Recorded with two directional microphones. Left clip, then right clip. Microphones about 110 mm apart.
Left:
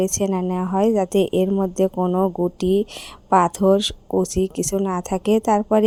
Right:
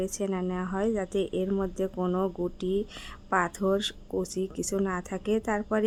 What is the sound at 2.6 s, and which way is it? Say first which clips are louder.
Speech: left 10 dB; 50° left (ahead or behind).